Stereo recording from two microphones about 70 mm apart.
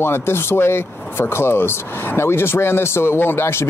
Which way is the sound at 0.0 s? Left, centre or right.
Left.